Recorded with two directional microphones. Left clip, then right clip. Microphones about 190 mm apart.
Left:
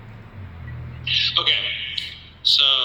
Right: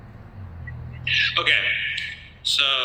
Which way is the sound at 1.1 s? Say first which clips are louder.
Even; 15° right (ahead or behind).